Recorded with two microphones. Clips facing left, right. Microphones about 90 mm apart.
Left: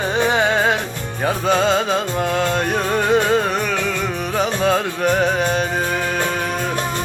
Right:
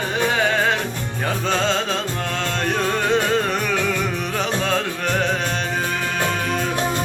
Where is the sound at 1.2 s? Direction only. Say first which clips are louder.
Left 5 dB; 10° left (ahead or behind).